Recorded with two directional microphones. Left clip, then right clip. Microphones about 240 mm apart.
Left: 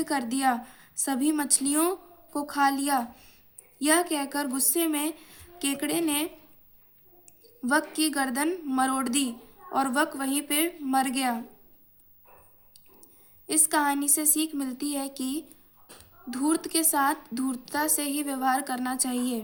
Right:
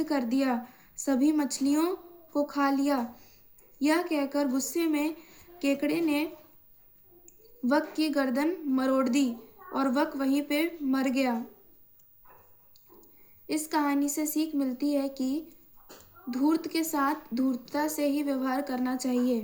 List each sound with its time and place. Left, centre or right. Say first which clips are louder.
0.0 s a woman's voice: left 2 dB; left
7.7 s a woman's voice: left 1 dB; left
13.5 s a woman's voice: left 3 dB; left